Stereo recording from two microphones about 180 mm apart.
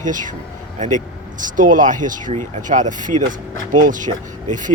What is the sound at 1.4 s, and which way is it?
Speech, 45° right (ahead or behind).